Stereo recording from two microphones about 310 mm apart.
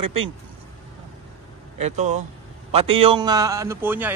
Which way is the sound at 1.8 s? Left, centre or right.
Right.